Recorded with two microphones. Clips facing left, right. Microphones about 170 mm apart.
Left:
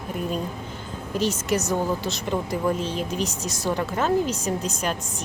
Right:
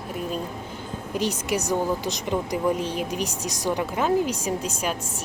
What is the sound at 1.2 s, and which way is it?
A woman's voice, 10° right (ahead or behind).